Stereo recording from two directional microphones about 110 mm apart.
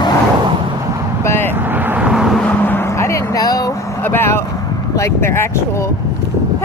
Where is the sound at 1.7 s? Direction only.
15° right (ahead or behind).